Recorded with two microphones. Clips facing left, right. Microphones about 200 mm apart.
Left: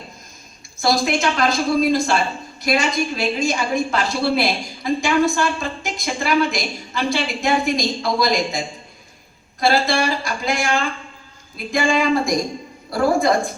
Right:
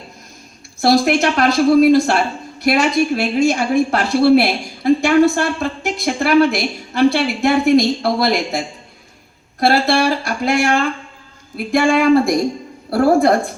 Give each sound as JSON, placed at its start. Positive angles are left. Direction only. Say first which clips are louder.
{"t": 0.8, "sound": "speech", "louder": "right 6 dB", "side_deg": -60}